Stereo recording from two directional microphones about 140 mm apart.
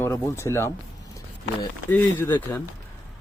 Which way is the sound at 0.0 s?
15° left (ahead or behind).